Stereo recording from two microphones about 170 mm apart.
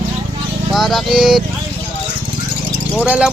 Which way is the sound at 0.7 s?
Centre (ahead or behind).